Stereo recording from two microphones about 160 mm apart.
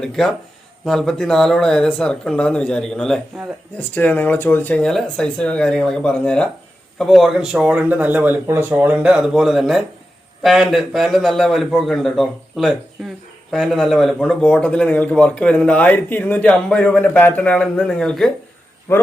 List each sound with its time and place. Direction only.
0.0 s a man's voice: 5° left (ahead or behind)
18.9 s a man's voice: 15° left (ahead or behind)